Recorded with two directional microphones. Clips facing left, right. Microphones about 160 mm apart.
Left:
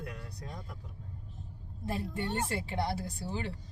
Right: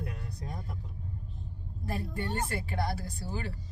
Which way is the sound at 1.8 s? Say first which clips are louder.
Even; 25° left (ahead or behind).